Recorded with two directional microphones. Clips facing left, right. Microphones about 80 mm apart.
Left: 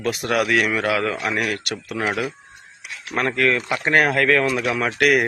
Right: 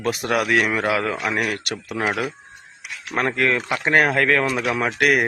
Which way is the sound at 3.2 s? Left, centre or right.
Right.